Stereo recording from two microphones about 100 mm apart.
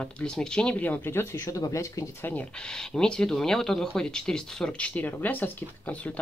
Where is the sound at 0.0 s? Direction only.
5° left (ahead or behind); by 2.0 s 35° left (ahead or behind).